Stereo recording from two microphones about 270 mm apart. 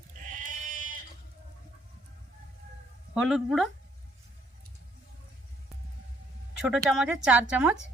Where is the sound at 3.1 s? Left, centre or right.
Centre.